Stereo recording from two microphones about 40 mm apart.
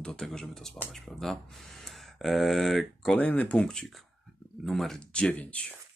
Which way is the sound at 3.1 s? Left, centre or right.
Left.